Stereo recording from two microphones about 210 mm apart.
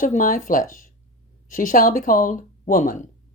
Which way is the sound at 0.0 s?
40° left (ahead or behind).